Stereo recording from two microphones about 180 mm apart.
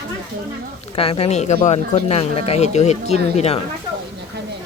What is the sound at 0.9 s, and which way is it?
Speech, 30° left (ahead or behind).